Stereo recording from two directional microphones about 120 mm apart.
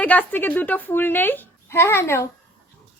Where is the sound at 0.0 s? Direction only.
10° left (ahead or behind).